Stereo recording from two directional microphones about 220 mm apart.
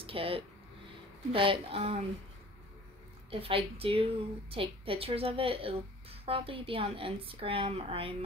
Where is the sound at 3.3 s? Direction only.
25° right (ahead or behind).